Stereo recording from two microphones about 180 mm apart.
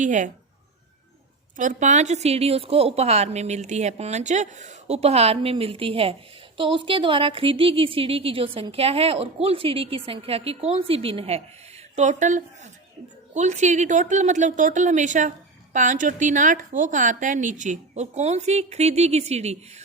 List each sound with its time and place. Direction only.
0.0 s a woman's voice: 45° right (ahead or behind)
1.5 s a woman's voice: 45° right (ahead or behind)